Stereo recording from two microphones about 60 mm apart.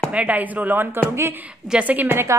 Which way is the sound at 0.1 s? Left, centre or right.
Right.